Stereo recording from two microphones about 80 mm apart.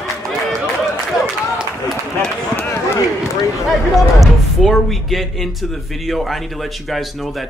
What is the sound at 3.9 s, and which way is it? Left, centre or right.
Speech, centre.